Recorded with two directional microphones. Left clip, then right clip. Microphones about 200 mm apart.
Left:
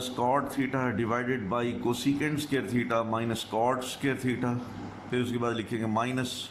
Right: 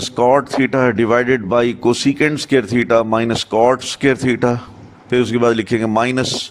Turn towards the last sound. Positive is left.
turn(degrees=-40)  # may be behind; listen again after turning